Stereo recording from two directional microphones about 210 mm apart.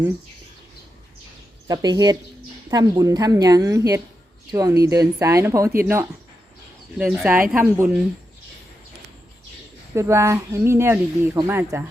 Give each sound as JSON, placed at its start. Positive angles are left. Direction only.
{"t": 1.6, "sound": "speech", "side_deg": -20}
{"t": 9.9, "sound": "speech", "side_deg": -15}